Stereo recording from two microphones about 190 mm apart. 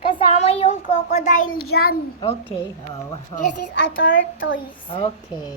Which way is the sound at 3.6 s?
70° left (ahead or behind).